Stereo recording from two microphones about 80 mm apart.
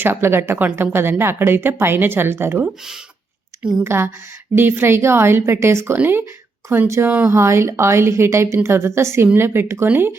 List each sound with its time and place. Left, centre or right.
0.0 s a woman's voice: right
3.6 s speech: centre
3.8 s a woman's voice: right